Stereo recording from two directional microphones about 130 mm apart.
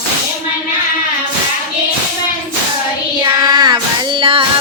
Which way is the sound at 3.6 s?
35° right (ahead or behind).